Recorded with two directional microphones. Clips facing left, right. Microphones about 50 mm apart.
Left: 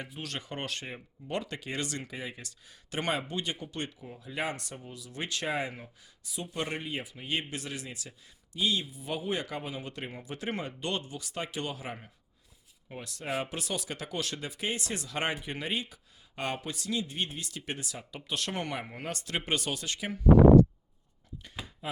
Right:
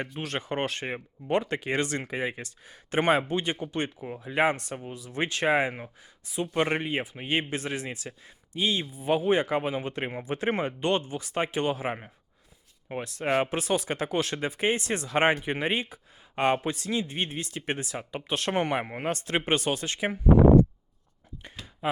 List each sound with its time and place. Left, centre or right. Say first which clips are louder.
0.2 s speech: right 8 dB; right